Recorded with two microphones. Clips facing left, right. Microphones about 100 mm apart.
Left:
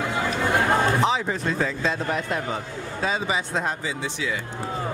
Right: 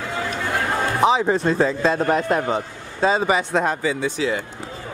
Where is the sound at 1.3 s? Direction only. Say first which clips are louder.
Right 7 dB; 30° right (ahead or behind); by 2.4 s 50° right (ahead or behind).